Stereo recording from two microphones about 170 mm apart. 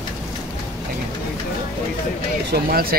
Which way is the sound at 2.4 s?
60° right (ahead or behind).